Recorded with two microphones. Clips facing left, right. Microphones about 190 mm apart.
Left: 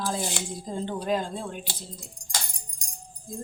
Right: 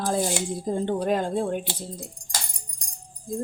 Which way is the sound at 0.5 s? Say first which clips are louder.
Right 6 dB; 55° right (ahead or behind).